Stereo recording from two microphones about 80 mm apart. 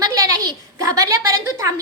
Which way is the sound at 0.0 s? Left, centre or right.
Right.